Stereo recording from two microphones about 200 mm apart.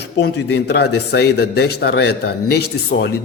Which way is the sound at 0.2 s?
60° left (ahead or behind).